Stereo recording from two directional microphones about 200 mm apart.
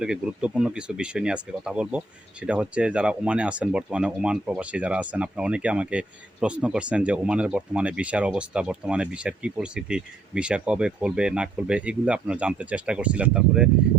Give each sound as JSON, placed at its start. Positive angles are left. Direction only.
{"t": 0.0, "sound": "speech", "side_deg": -5}